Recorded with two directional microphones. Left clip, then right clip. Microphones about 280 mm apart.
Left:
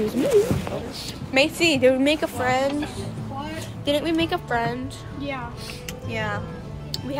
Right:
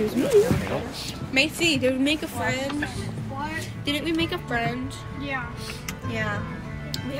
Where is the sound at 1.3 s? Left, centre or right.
Centre.